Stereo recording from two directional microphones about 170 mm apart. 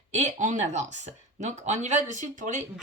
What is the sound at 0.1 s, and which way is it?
Speech, 45° right (ahead or behind).